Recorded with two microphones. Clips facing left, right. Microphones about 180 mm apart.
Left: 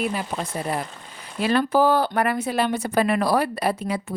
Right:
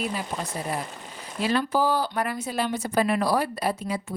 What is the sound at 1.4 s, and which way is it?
Speech, 60° left (ahead or behind).